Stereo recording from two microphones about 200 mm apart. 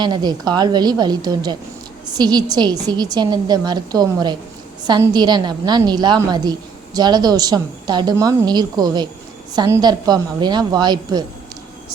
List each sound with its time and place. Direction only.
0.0 s a woman's voice: 20° right (ahead or behind)